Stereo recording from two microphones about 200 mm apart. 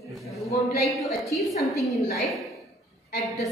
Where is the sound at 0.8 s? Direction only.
Centre (ahead or behind).